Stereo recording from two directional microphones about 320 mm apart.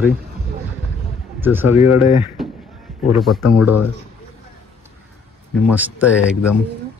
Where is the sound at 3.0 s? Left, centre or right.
Centre.